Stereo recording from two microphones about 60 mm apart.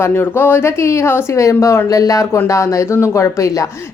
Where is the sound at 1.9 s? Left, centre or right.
Left.